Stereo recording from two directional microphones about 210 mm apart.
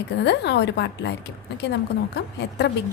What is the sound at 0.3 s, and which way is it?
Speech, 55° left (ahead or behind).